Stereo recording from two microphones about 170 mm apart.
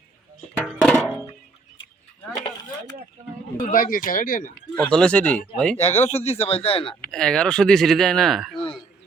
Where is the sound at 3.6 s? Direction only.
55° left (ahead or behind).